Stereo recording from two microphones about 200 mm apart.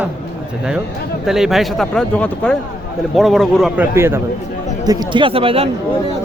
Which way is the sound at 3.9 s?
10° right (ahead or behind).